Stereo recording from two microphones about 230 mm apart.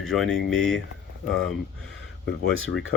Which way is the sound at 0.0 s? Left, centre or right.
Centre.